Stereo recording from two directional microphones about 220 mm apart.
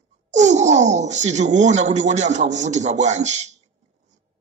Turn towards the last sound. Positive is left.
turn(degrees=-30)  # may be behind; listen again after turning